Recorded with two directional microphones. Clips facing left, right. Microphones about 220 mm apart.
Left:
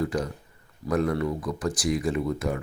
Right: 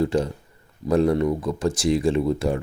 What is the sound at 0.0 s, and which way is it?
Speech, 25° right (ahead or behind).